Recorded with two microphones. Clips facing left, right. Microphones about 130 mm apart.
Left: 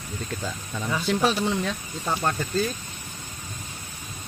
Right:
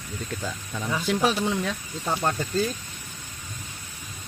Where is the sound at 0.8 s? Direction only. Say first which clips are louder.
Even; 5° right (ahead or behind).